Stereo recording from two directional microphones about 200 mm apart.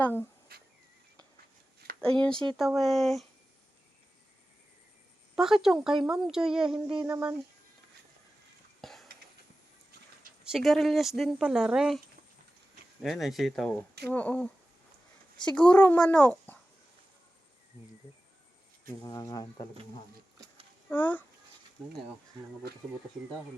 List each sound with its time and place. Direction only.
0.0 s speech: 10° left (ahead or behind)
0.5 s insect: 50° right (ahead or behind)
2.0 s a woman's voice: 5° left (ahead or behind)
5.4 s a woman's voice: centre (ahead or behind)
8.8 s a sound: centre (ahead or behind)
10.4 s a woman's voice: centre (ahead or behind)
13.0 s a woman's voice: centre (ahead or behind)
15.7 s speech: 10° left (ahead or behind)
18.9 s speech: 15° left (ahead or behind)
20.9 s speech: 10° left (ahead or behind)